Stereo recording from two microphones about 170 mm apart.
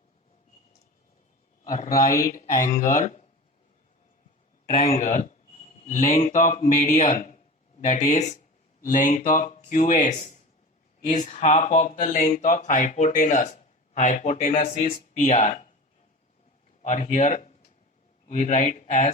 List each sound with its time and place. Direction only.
1.6 s a man's voice: 50° left (ahead or behind)
4.7 s speech: 40° left (ahead or behind)
15.2 s speech: 45° left (ahead or behind)
16.8 s speech: 50° left (ahead or behind)